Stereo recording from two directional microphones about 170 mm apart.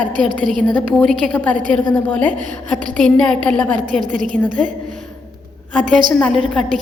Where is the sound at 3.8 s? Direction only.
50° right (ahead or behind).